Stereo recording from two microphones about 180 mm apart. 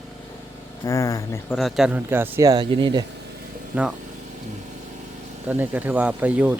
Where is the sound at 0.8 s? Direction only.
15° left (ahead or behind).